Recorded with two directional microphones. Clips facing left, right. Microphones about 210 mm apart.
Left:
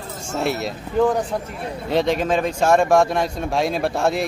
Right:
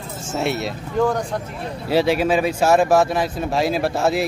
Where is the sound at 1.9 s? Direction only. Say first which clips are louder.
Right 2 dB; 5° right (ahead or behind).